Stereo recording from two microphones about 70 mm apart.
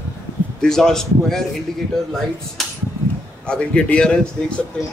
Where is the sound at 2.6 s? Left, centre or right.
Centre.